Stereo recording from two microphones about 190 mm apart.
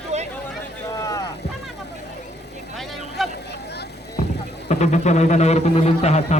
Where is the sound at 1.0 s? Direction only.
20° left (ahead or behind).